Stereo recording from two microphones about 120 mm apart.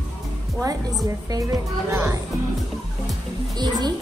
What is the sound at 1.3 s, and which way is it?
Speech, 25° right (ahead or behind).